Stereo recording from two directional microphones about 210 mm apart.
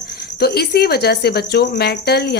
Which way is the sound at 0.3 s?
50° left (ahead or behind).